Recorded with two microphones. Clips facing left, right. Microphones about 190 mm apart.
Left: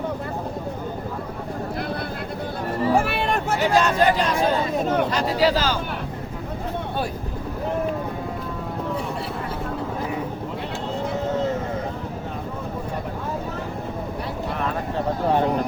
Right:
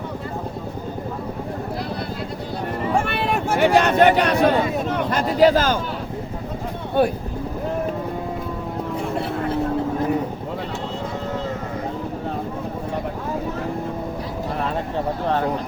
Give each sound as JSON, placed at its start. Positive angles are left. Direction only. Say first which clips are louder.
{"t": 3.0, "sound": "a sound", "louder": "right 1 dB", "side_deg": 0}
{"t": 3.6, "sound": "speech", "louder": "right 5 dB", "side_deg": -60}
{"t": 5.1, "sound": "speech", "louder": "right 4 dB", "side_deg": -50}